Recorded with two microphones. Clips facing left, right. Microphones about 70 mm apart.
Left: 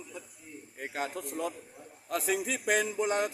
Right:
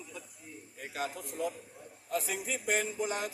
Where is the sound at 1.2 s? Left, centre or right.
Left.